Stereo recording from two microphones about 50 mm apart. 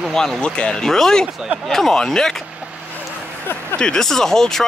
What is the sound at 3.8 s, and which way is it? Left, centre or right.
Speech, centre.